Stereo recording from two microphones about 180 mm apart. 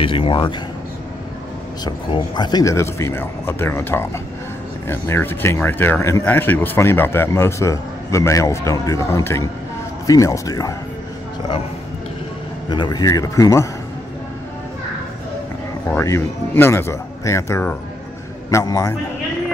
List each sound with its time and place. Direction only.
0.0 s speech: 30° left (ahead or behind)
1.9 s speech: 25° left (ahead or behind)
12.6 s speech: 25° left (ahead or behind)
15.9 s speech: 15° left (ahead or behind)